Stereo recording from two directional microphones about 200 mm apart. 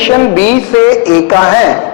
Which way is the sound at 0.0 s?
10° left (ahead or behind).